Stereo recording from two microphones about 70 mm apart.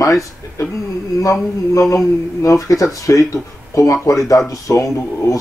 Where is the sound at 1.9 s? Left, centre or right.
Left.